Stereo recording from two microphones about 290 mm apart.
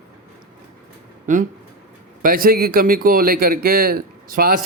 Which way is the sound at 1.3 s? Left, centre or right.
Right.